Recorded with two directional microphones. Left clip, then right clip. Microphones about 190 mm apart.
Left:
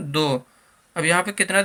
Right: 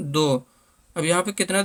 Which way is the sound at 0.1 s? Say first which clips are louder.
Even; 45° right (ahead or behind).